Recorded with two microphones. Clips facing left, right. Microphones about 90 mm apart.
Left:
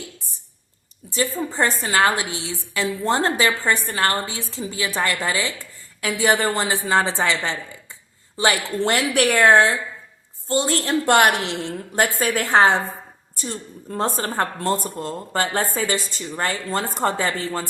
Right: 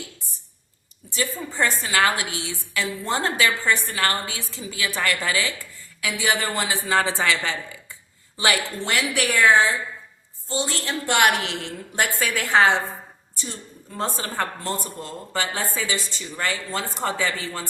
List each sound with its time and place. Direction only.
1.2 s a woman's voice: 30° left (ahead or behind)
6.0 s a woman's voice: 40° left (ahead or behind)
8.8 s a woman's voice: 45° left (ahead or behind)